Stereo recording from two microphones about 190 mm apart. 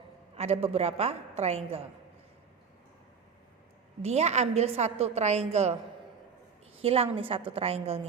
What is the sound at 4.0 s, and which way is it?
A woman's voice, 35° right (ahead or behind).